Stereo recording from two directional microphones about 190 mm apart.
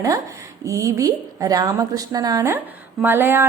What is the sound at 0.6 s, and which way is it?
A woman's voice, 15° right (ahead or behind).